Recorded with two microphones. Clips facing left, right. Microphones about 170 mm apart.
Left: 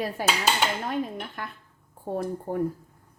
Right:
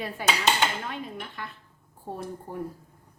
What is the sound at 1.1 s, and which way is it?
Speech, 50° left (ahead or behind).